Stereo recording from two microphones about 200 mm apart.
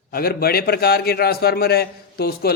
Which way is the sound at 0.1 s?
50° left (ahead or behind).